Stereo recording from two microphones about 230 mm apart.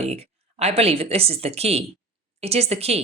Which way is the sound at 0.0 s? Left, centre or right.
Right.